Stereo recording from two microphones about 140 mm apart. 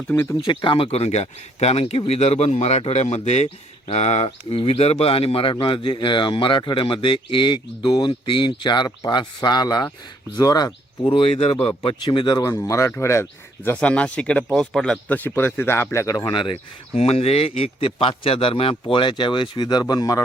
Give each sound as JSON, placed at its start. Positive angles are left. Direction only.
{"t": 0.1, "sound": "speech", "side_deg": 15}
{"t": 0.4, "sound": "a man's voice", "side_deg": 35}
{"t": 12.4, "sound": "speech", "side_deg": 20}
{"t": 13.7, "sound": "speech", "side_deg": 10}
{"t": 16.9, "sound": "a man's voice", "side_deg": 50}